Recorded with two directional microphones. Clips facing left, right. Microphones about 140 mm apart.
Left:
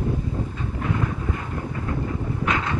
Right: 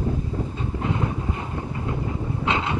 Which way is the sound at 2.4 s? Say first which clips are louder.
Right 1 dB; 25° right (ahead or behind).